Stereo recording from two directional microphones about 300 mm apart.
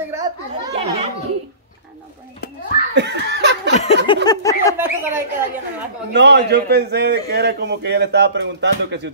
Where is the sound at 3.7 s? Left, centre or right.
Left.